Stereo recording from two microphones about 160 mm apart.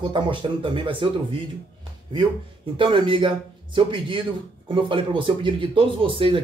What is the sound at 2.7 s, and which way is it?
Speech, 30° right (ahead or behind).